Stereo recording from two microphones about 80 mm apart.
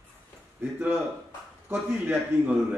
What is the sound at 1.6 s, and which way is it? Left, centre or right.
Speech, right.